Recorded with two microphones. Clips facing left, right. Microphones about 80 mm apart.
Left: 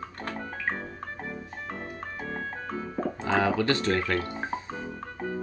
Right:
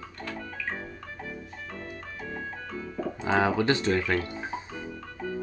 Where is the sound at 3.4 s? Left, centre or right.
Centre.